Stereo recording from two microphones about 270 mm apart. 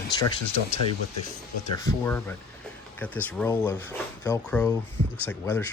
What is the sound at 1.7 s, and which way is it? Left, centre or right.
Speech, centre.